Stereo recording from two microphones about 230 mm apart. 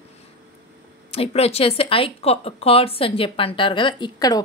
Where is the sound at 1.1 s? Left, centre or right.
Left.